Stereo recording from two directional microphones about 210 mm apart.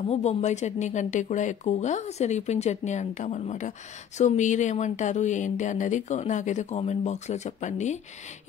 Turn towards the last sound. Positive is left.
turn(degrees=35)  # may be behind; listen again after turning